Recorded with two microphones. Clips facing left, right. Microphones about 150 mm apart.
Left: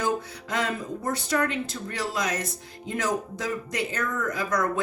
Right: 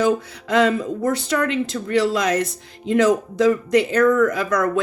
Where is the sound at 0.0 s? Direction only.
85° right.